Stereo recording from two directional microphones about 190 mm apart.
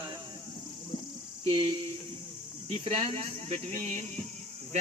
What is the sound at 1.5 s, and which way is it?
Speech, 25° right (ahead or behind).